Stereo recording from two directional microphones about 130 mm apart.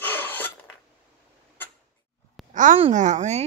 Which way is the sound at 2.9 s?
70° right (ahead or behind).